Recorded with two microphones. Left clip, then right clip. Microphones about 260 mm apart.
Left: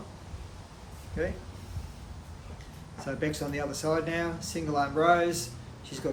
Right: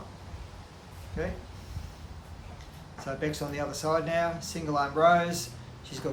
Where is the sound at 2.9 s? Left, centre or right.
Right.